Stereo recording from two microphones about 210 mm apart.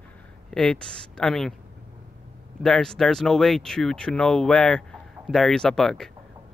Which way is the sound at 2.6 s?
5° left (ahead or behind).